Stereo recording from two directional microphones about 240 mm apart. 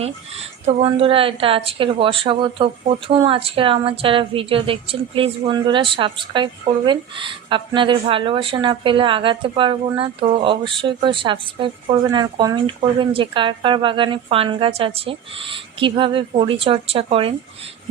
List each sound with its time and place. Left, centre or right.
0.0 s a woman's voice: right